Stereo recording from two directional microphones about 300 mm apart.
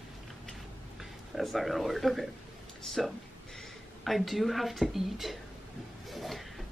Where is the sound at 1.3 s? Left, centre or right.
Centre.